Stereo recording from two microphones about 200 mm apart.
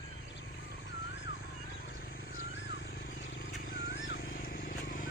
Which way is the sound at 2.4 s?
60° left (ahead or behind).